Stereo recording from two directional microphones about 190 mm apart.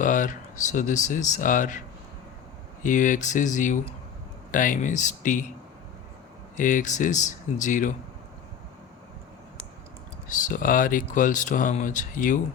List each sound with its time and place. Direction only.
0.0 s speech: 45° left (ahead or behind)
2.8 s speech: 40° left (ahead or behind)
6.6 s speech: 40° left (ahead or behind)
10.2 s speech: 45° left (ahead or behind)